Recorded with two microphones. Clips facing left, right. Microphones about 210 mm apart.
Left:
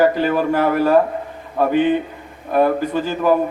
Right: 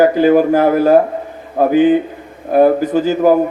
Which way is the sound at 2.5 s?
40° right (ahead or behind).